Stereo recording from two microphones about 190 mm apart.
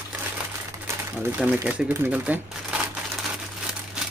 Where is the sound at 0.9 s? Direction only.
10° right (ahead or behind).